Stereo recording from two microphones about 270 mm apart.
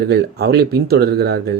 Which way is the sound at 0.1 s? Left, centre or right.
Right.